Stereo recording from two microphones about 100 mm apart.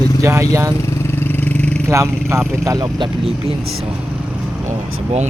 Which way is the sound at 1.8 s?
30° right (ahead or behind).